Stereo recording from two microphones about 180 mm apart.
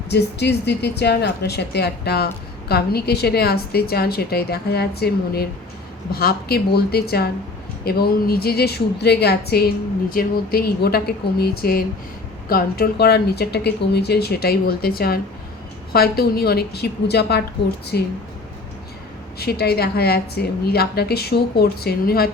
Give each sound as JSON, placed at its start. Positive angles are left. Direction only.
{"t": 0.1, "sound": "speech", "side_deg": 70}
{"t": 19.4, "sound": "speech", "side_deg": 60}